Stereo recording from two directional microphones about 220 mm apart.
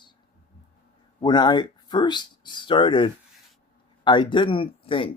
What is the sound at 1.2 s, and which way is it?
Speech, 20° left (ahead or behind).